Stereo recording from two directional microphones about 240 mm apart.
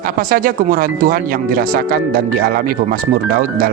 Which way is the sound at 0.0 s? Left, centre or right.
Right.